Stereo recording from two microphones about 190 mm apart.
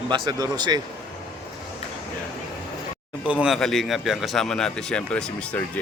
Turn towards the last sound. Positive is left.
turn(degrees=5)  # may be behind; listen again after turning